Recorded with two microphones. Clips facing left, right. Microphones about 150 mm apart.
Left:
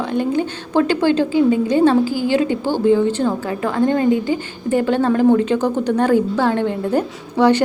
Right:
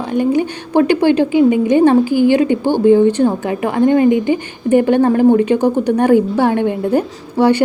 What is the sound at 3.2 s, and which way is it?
A woman's voice, 15° right (ahead or behind).